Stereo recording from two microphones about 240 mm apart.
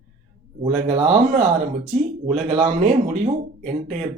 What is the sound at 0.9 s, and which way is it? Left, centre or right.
Speech, right.